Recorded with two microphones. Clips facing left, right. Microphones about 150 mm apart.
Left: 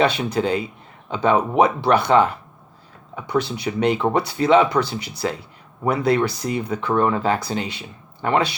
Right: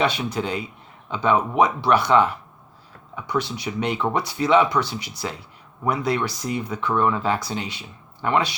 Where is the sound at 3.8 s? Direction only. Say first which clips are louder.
Left 5 dB; 40° left (ahead or behind).